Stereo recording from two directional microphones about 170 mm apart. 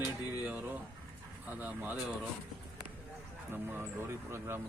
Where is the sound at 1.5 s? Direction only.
10° right (ahead or behind).